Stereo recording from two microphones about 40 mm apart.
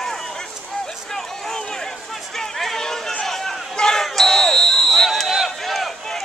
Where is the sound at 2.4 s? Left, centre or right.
Centre.